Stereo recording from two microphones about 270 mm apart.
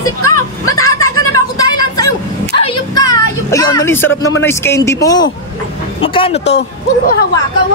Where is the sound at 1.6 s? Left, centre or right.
Left.